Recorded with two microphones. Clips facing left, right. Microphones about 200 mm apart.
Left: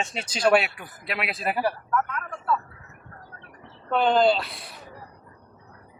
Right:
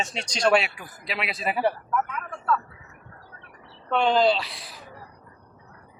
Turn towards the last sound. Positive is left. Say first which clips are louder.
# left 1 dB
turn(degrees=0)  # may be behind; listen again after turning